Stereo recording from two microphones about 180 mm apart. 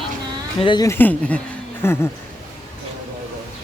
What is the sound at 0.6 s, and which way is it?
Speech, 25° left (ahead or behind).